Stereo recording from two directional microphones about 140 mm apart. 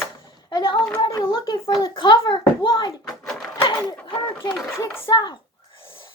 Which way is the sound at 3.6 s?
35° left (ahead or behind).